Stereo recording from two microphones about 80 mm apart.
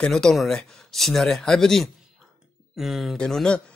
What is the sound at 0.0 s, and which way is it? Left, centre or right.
Speech, centre.